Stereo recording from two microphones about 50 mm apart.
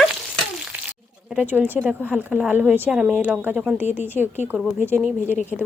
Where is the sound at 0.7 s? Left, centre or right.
Right.